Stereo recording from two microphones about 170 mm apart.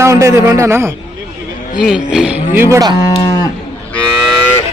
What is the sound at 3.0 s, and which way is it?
Moo, 20° left (ahead or behind).